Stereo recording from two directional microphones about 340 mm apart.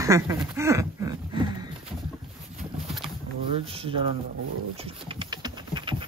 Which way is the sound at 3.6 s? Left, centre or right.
Centre.